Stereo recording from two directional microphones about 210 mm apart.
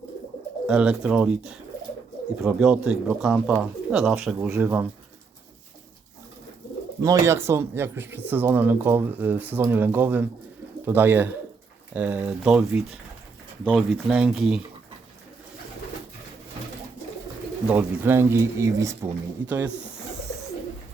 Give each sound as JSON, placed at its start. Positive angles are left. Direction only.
{"t": 0.7, "sound": "speech", "side_deg": -5}
{"t": 7.0, "sound": "speech", "side_deg": -15}
{"t": 17.7, "sound": "speech", "side_deg": -10}